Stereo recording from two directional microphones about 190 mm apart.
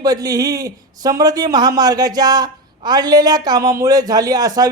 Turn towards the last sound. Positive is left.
turn(degrees=-20)  # may be behind; listen again after turning